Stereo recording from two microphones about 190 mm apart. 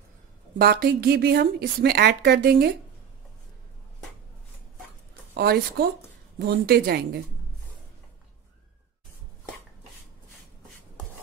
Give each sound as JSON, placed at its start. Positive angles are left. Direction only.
{"t": 0.6, "sound": "speech", "side_deg": -55}
{"t": 5.3, "sound": "a woman's voice", "side_deg": -55}